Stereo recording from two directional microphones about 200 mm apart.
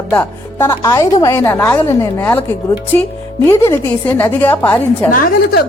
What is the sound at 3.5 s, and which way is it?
Speech, 15° left (ahead or behind).